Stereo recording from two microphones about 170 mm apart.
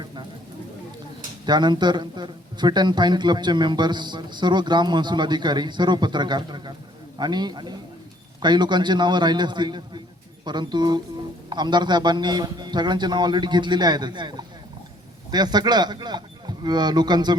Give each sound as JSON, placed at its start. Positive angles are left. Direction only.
{"t": 1.5, "sound": "speech", "side_deg": -25}